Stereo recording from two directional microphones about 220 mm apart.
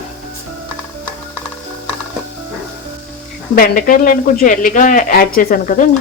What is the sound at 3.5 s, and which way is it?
Speech, 40° left (ahead or behind).